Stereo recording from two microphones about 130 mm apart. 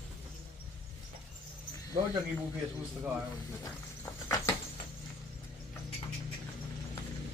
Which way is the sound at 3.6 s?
25° left (ahead or behind).